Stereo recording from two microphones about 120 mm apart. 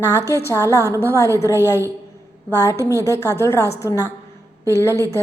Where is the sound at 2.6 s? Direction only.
25° left (ahead or behind).